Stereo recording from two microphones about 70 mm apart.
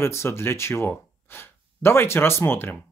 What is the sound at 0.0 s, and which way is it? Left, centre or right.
Speech, left.